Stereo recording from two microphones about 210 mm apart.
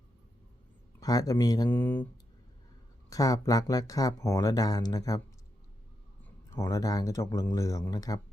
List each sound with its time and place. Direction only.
0.9 s speech: 15° left (ahead or behind)
3.1 s speech: 15° left (ahead or behind)
6.5 s speech: 15° left (ahead or behind)